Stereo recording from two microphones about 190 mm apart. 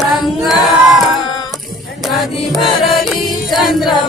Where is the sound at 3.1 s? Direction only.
Centre (ahead or behind).